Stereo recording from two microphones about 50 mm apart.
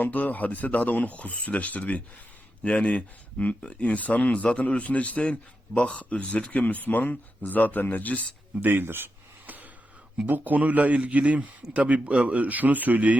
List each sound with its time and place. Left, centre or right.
0.0 s speech: left
8.6 s speech: right
10.2 s a man's voice: right